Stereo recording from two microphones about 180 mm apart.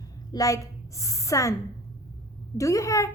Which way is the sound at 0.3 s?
20° left (ahead or behind).